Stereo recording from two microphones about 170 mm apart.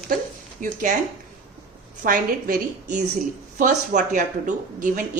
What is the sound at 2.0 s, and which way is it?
Speech, 55° right (ahead or behind).